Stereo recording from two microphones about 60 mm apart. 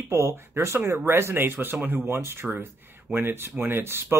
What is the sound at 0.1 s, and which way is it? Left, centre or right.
Speech, right.